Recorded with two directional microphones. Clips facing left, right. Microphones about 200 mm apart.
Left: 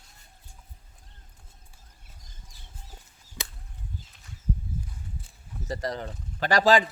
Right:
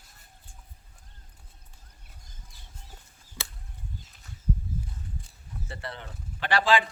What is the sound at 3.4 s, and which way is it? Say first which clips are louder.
Chop: left 2 dB; 5° left (ahead or behind).